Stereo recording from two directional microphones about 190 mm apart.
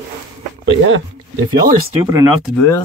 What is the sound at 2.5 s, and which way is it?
Speech, 10° left (ahead or behind).